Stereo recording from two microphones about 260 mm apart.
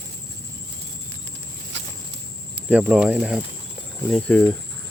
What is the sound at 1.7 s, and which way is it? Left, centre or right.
Walk, right.